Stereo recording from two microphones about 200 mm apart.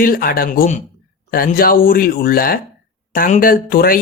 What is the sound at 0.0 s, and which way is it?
Speech, 45° left (ahead or behind).